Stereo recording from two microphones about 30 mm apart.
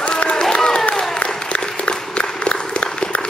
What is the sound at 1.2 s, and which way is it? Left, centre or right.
Applause, left.